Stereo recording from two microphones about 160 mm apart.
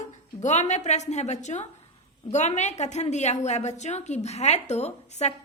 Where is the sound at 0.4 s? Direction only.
45° left (ahead or behind).